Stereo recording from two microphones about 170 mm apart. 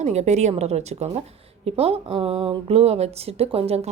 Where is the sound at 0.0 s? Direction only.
40° right (ahead or behind).